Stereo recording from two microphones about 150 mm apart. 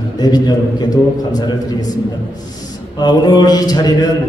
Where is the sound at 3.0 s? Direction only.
30° left (ahead or behind).